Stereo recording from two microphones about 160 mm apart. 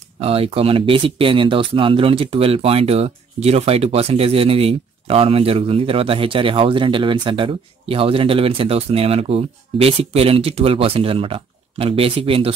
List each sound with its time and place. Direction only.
0.2 s speech: 35° right (ahead or behind)